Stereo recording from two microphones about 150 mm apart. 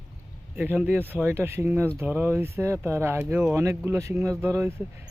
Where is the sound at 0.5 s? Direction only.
10° right (ahead or behind).